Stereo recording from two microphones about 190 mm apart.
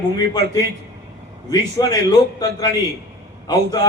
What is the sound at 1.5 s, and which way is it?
A man's voice, 20° left (ahead or behind).